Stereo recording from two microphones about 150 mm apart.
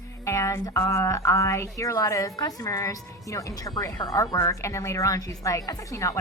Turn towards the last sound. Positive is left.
turn(degrees=20)  # may be behind; listen again after turning